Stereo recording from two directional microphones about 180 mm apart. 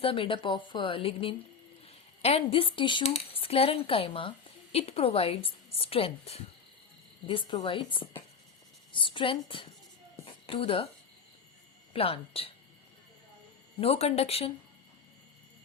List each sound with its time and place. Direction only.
0.0 s speech: 30° left (ahead or behind)
11.9 s speech: 30° left (ahead or behind)
13.7 s speech: 35° left (ahead or behind)